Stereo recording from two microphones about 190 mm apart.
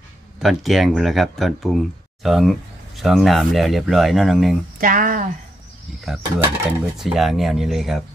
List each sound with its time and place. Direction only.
0.4 s speech: centre (ahead or behind)
4.7 s speech: 45° right (ahead or behind)
6.0 s speech: 5° right (ahead or behind)